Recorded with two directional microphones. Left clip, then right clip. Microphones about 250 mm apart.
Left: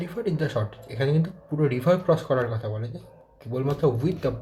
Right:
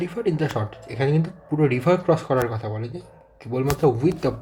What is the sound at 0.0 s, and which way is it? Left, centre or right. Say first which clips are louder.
Speech: right 4 dB; right.